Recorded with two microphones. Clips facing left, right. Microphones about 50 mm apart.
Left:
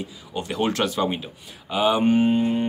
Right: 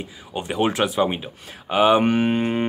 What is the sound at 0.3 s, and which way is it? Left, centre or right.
Speech, right.